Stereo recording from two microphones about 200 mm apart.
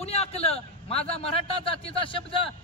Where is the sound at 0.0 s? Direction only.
30° left (ahead or behind).